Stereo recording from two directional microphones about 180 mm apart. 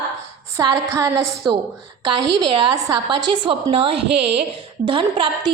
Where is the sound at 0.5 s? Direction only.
20° right (ahead or behind).